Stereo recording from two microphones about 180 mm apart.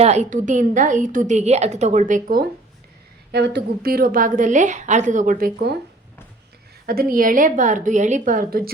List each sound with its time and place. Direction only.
0.0 s a woman's voice: 40° right (ahead or behind)
3.3 s a woman's voice: 70° right (ahead or behind); by 5.7 s 50° right (ahead or behind)
6.8 s a woman's voice: 55° right (ahead or behind)